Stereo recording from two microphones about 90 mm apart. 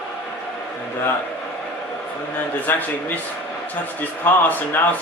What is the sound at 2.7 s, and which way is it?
Speech, 25° left (ahead or behind).